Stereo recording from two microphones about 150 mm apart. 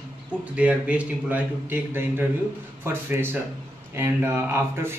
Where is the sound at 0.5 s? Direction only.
10° right (ahead or behind).